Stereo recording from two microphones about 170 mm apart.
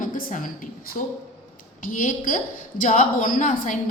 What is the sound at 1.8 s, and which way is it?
A woman's voice, 50° left (ahead or behind).